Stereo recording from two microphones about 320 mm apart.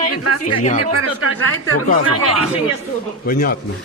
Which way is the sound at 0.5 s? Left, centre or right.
Left.